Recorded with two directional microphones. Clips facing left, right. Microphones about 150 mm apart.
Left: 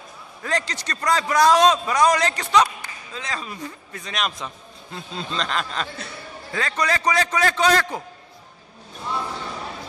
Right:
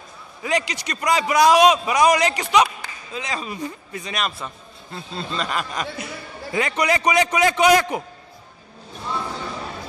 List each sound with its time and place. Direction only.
0.4 s a man's voice: 10° right (ahead or behind)